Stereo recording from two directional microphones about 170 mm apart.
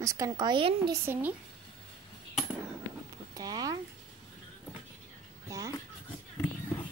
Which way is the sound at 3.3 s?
20° right (ahead or behind).